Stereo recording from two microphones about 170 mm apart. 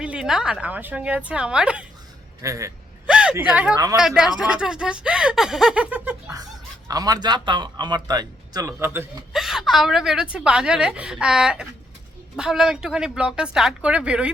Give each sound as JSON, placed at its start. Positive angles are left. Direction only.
{"t": 0.0, "sound": "a woman's voice", "side_deg": -5}
{"t": 2.4, "sound": "speech", "side_deg": -20}
{"t": 3.1, "sound": "a sound", "side_deg": -5}
{"t": 3.4, "sound": "a woman's voice", "side_deg": -5}
{"t": 6.3, "sound": "speech", "side_deg": -20}
{"t": 9.3, "sound": "speech", "side_deg": 0}